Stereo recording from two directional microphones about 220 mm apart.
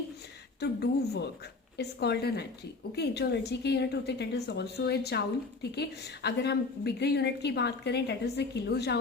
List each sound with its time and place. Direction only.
0.6 s a woman's voice: 50° left (ahead or behind)